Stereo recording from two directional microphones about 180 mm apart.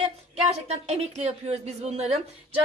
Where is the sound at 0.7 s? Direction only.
40° right (ahead or behind).